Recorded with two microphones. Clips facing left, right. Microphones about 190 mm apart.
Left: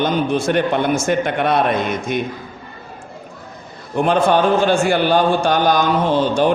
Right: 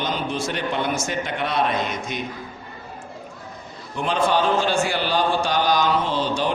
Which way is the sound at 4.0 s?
55° left (ahead or behind).